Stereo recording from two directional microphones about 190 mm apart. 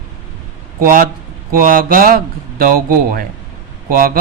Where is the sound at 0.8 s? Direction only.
45° right (ahead or behind).